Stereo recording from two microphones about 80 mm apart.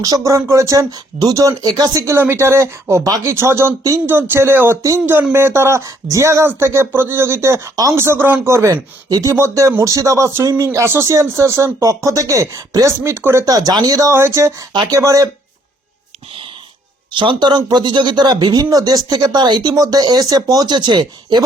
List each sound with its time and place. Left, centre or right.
0.0 s speech: right
0.9 s speech: right
1.4 s speech: right
2.0 s speech: right
9.0 s speech: right
9.3 s speech: right
13.0 s speech: right
13.4 s speech: right
14.1 s speech: right
14.7 s speech: right
14.9 s speech: right
17.1 s speech: right
18.6 s speech: right